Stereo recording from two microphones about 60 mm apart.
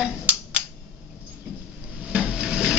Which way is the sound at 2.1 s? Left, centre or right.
Centre.